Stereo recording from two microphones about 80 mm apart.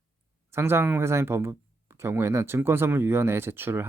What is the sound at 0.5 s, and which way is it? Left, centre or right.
Speech, right.